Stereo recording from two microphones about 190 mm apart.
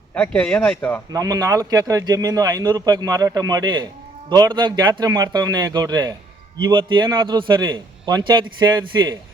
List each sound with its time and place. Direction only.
0.1 s speech: 5° left (ahead or behind)
1.1 s speech: 20° right (ahead or behind)